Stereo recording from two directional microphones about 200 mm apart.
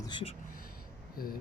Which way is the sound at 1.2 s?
45° left (ahead or behind).